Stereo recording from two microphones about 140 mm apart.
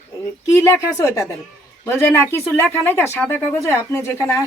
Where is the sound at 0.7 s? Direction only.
20° left (ahead or behind).